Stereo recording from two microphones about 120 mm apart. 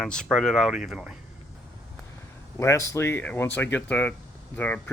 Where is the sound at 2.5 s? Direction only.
25° left (ahead or behind).